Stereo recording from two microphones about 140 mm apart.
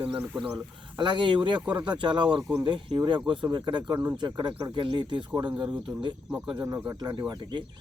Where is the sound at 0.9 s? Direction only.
35° right (ahead or behind).